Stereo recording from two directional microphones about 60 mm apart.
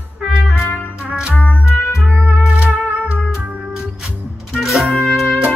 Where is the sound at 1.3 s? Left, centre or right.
Left.